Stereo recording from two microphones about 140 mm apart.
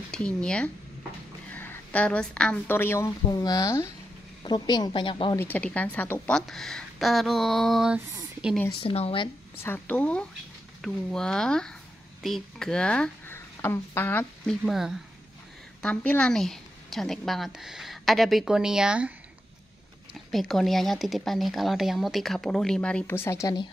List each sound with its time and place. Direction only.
0.1 s a woman's voice: 5° left (ahead or behind); by 5.4 s 35° left (ahead or behind)
5.4 s a woman's voice: 10° left (ahead or behind)
6.3 s speech: 5° left (ahead or behind)
8.8 s speech: 45° left (ahead or behind)
9.6 s a woman's voice: 15° left (ahead or behind)
14.4 s speech: centre (ahead or behind)
15.8 s speech: 10° left (ahead or behind); by 19.1 s 5° right (ahead or behind)
20.2 s speech: centre (ahead or behind); by 23.7 s 25° left (ahead or behind)